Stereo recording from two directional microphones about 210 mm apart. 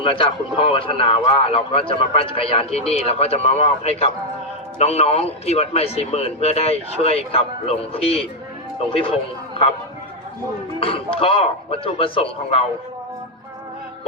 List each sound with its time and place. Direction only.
0.0 s speech: 25° left (ahead or behind)
8.0 s speech: 5° left (ahead or behind)
10.8 s speech: 25° left (ahead or behind)